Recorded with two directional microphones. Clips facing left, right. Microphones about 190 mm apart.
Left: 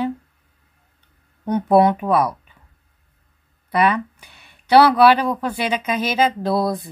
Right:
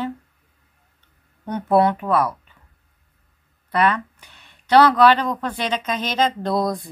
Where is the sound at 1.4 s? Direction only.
15° left (ahead or behind).